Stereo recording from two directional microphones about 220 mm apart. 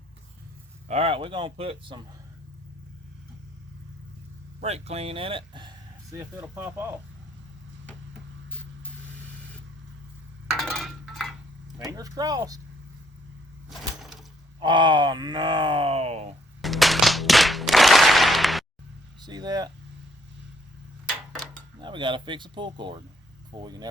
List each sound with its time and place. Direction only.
0.9 s speech: 25° right (ahead or behind)
4.6 s speech: 30° right (ahead or behind); by 6.9 s 10° right (ahead or behind)
10.5 s a sound: centre (ahead or behind)
11.9 s speech: 15° right (ahead or behind)
13.7 s a sound: centre (ahead or behind)
14.6 s speech: 20° right (ahead or behind)
16.6 s a sound: centre (ahead or behind)
19.2 s speech: 20° right (ahead or behind)
21.8 s speech: 20° right (ahead or behind)